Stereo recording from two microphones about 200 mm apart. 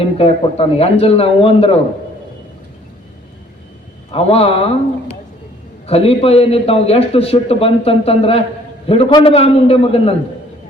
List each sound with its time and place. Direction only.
0.0 s a man's voice: 30° left (ahead or behind)
4.1 s a man's voice: 30° left (ahead or behind)